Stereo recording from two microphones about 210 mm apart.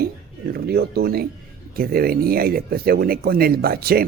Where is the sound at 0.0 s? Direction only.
45° right (ahead or behind).